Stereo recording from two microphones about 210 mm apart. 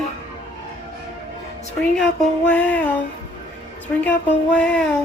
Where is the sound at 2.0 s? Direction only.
5° left (ahead or behind).